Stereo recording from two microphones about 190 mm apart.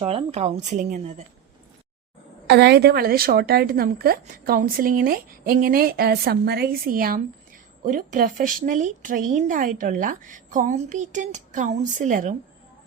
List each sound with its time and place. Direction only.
0.0 s a woman's voice: 30° right (ahead or behind)
2.5 s a woman's voice: 60° right (ahead or behind); by 12.4 s 40° right (ahead or behind)